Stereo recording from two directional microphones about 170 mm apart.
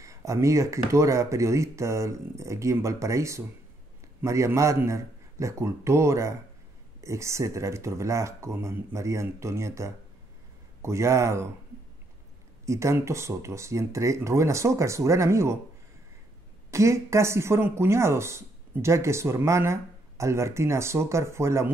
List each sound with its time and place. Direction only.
0.0 s speech: 20° right (ahead or behind)
12.6 s speech: 15° right (ahead or behind)
16.7 s speech: 15° right (ahead or behind)